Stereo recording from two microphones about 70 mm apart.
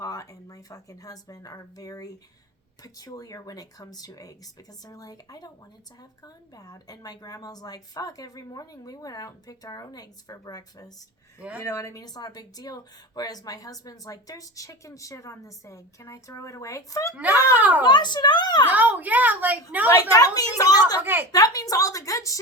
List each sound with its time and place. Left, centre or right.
0.0 s a woman's voice: left
11.3 s a woman's voice: centre
11.6 s speech: left
17.5 s a woman's voice: right
17.8 s a woman's voice: left
18.7 s a woman's voice: right
19.9 s a woman's voice: left
21.0 s a woman's voice: right
21.3 s a woman's voice: left